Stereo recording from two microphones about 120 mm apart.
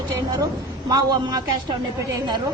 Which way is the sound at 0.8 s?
35° right (ahead or behind).